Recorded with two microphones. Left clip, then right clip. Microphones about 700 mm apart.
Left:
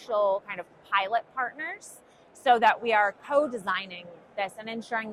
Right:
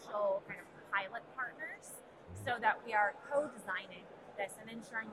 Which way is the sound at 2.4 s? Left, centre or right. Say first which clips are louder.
Left 14 dB; left.